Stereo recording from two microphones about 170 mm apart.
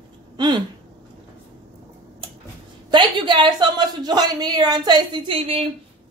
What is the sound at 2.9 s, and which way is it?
A woman's voice, 30° right (ahead or behind).